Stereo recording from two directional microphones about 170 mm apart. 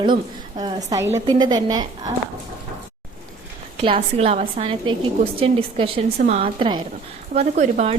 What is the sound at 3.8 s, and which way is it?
A woman's voice, 35° right (ahead or behind).